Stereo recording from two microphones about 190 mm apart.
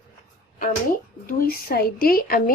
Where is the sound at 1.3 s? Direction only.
50° left (ahead or behind).